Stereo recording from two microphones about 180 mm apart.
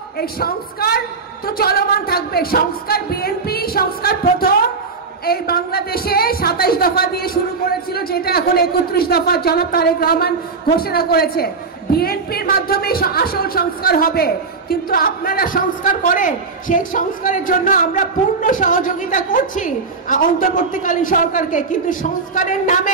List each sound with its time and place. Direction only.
0.2 s a woman's voice: 55° left (ahead or behind)